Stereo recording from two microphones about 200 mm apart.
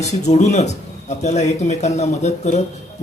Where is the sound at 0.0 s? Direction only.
35° left (ahead or behind).